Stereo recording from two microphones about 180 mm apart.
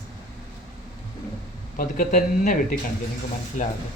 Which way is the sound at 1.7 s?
45° left (ahead or behind).